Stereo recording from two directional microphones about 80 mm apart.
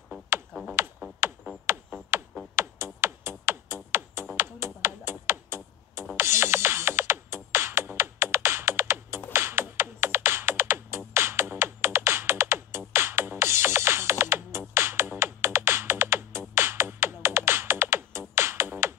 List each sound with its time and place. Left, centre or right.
0.5 s music: centre
1.0 s music: right
2.5 s music: right